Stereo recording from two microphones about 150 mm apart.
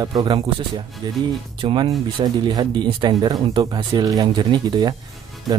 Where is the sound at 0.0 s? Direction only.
25° right (ahead or behind).